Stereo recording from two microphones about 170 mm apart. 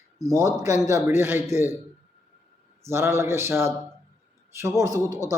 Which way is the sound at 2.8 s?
15° right (ahead or behind).